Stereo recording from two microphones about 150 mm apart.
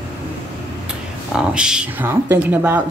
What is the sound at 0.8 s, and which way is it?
Speech, 5° right (ahead or behind).